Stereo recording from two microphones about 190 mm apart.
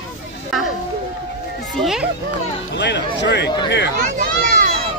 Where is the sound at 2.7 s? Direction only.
65° left (ahead or behind).